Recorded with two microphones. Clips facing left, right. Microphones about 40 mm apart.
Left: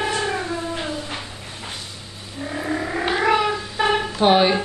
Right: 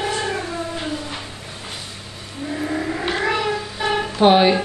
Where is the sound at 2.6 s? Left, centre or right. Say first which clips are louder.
Even; centre.